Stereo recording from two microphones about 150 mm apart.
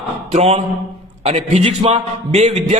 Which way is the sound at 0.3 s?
45° right (ahead or behind).